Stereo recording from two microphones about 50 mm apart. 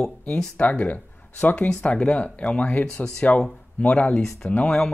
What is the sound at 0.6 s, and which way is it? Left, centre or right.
Speech, left.